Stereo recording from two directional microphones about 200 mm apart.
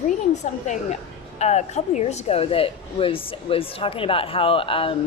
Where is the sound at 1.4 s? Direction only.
35° left (ahead or behind).